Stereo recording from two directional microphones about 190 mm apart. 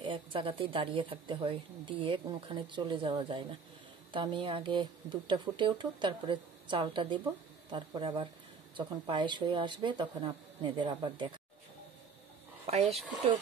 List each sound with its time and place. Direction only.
0.0 s speech: 25° right (ahead or behind)
12.6 s speech: 35° right (ahead or behind)